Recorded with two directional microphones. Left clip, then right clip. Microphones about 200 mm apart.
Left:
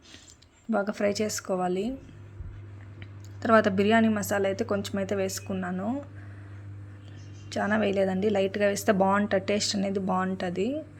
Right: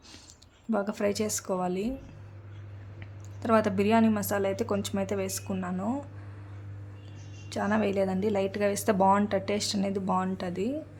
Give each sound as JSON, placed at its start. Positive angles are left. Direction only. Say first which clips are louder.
{"t": 0.7, "sound": "speech", "louder": "left 2 dB", "side_deg": 0}
{"t": 3.4, "sound": "speech", "louder": "left 3 dB", "side_deg": 5}
{"t": 7.5, "sound": "speech", "louder": "left 2 dB", "side_deg": 0}